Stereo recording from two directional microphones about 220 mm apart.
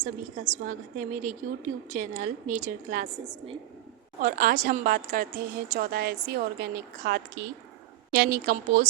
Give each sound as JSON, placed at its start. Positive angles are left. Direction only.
{"t": 0.0, "sound": "a woman's voice", "side_deg": -35}
{"t": 4.2, "sound": "a woman's voice", "side_deg": -40}